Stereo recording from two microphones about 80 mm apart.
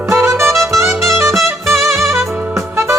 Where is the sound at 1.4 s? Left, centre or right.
Centre.